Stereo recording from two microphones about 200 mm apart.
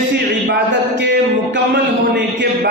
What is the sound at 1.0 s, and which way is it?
A man's voice, 60° right (ahead or behind).